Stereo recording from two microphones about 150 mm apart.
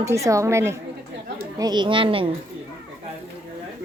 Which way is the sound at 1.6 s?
30° right (ahead or behind).